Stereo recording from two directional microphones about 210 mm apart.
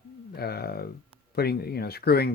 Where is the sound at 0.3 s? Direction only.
50° left (ahead or behind).